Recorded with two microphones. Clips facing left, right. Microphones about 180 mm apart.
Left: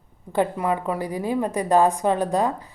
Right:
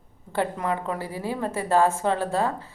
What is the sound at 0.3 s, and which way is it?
Speech, 10° left (ahead or behind).